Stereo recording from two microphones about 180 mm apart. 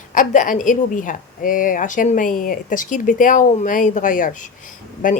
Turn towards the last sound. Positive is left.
turn(degrees=50)  # may be behind; listen again after turning